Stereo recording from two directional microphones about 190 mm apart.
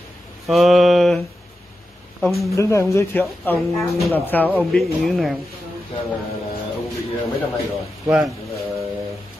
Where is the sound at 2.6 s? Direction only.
15° left (ahead or behind).